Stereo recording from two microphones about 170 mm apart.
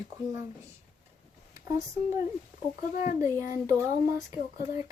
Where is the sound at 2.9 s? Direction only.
55° left (ahead or behind).